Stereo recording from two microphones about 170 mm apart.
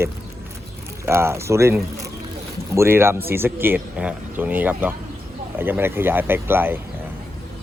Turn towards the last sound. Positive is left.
turn(degrees=-15)  # may be behind; listen again after turning